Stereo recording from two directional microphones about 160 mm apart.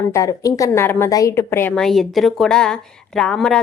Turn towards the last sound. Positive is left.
turn(degrees=5)  # may be behind; listen again after turning